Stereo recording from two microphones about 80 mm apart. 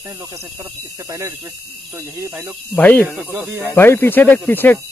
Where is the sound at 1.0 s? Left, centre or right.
Right.